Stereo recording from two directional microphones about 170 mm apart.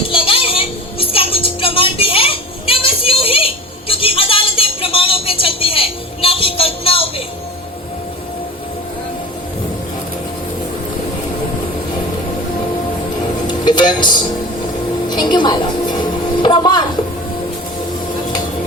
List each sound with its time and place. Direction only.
0.0 s music: 30° left (ahead or behind)
13.5 s music: 25° left (ahead or behind)